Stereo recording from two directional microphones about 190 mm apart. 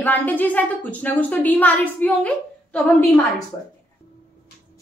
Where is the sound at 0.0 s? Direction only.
10° left (ahead or behind).